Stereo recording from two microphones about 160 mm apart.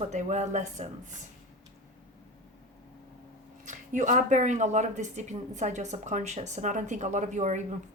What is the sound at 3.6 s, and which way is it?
Speech, 50° right (ahead or behind).